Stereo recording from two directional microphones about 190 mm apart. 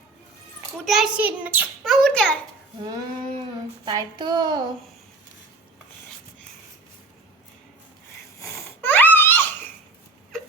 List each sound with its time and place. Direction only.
0.9 s a child's voice: centre (ahead or behind)
1.8 s a child's voice: 5° left (ahead or behind)
2.8 s speech: 20° right (ahead or behind)
8.8 s baby laughter: 10° left (ahead or behind)